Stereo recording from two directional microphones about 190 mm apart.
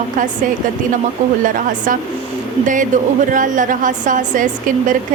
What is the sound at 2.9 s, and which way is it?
A woman's voice, 40° right (ahead or behind).